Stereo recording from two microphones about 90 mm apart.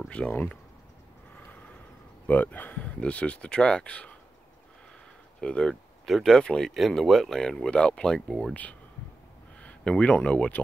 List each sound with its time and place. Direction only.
0.1 s speech: 15° left (ahead or behind)
2.2 s speech: 20° left (ahead or behind)
5.4 s speech: 10° left (ahead or behind)
9.6 s speech: 10° left (ahead or behind)